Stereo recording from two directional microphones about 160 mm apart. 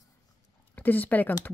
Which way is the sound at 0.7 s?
10° left (ahead or behind).